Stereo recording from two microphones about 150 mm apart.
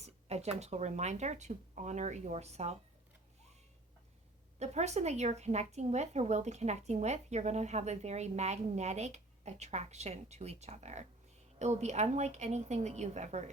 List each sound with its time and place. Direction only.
0.0 s a woman's voice: 45° right (ahead or behind)
4.6 s a woman's voice: 50° right (ahead or behind)